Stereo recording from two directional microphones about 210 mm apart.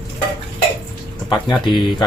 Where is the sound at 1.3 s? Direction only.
20° left (ahead or behind).